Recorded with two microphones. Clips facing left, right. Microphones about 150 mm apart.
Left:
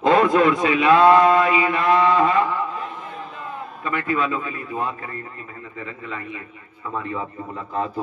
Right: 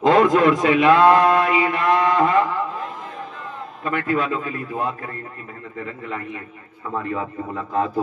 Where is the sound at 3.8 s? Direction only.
55° right (ahead or behind).